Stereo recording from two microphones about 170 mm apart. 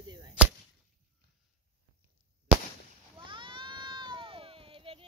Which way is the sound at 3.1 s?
30° right (ahead or behind).